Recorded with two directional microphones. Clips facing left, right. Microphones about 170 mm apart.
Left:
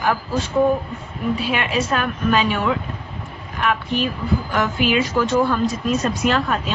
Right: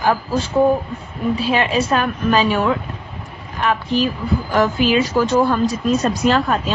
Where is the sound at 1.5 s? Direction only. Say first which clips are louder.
Right 4 dB; 30° right (ahead or behind).